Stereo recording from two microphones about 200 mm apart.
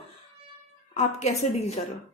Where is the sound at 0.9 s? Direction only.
35° left (ahead or behind).